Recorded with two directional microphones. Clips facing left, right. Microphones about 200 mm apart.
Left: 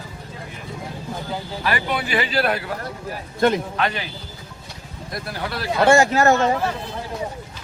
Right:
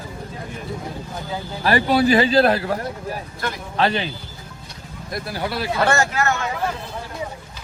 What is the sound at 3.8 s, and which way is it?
Speech, 30° right (ahead or behind).